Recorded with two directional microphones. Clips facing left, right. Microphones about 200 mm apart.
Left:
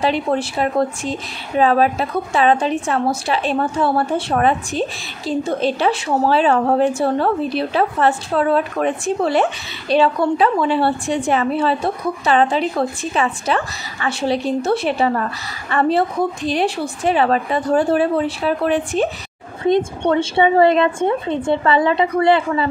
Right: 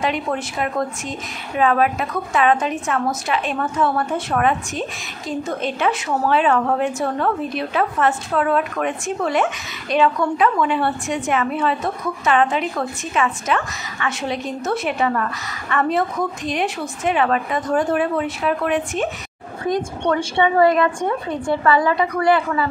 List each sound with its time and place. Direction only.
0.0 s a woman's voice: 30° left (ahead or behind)